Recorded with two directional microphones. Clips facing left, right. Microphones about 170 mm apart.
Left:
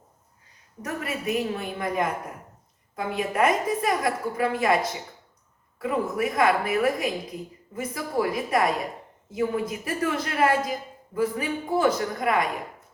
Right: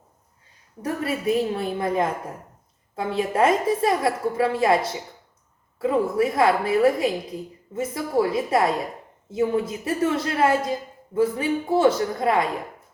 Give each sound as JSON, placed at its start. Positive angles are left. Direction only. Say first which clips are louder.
{"t": 0.8, "sound": "a woman's voice", "louder": "right 5 dB", "side_deg": -30}